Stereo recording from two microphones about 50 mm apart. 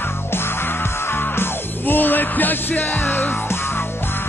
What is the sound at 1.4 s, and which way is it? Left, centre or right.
Music, left.